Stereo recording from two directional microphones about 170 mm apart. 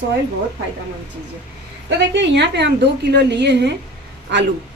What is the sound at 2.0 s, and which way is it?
A woman's voice, 90° right.